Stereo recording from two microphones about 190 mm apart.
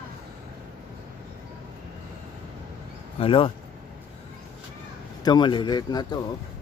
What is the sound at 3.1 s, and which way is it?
Speech, 30° left (ahead or behind).